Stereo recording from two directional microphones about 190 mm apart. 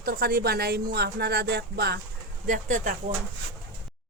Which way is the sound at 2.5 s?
40° right (ahead or behind).